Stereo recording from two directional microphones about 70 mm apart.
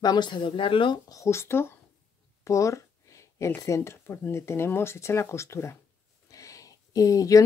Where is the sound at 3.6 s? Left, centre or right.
Left.